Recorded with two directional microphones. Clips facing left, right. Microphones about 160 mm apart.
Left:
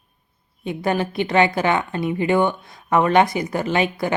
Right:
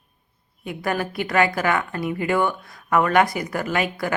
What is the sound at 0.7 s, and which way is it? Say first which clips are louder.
A woman's voice: left 3 dB; 25° left (ahead or behind).